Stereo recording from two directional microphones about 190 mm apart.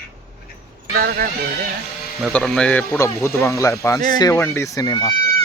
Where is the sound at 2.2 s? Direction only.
Centre (ahead or behind); by 5.1 s 25° left (ahead or behind).